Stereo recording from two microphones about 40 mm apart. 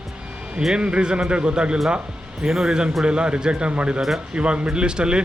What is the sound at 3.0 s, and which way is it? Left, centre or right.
Speech, right.